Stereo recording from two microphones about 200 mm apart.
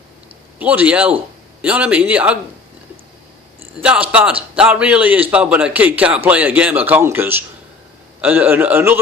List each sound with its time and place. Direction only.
0.6 s a man's voice: 5° right (ahead or behind)
3.8 s a man's voice: 5° right (ahead or behind)